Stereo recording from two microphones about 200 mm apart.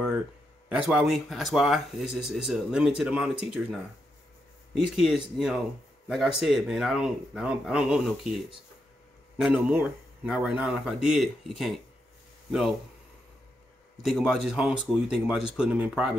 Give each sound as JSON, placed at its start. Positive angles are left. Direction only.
{"t": 0.7, "sound": "speech", "side_deg": -5}
{"t": 9.4, "sound": "speech", "side_deg": -5}
{"t": 14.0, "sound": "speech", "side_deg": 0}